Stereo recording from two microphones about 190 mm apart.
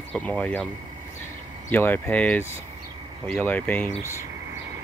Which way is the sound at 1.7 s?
10° left (ahead or behind).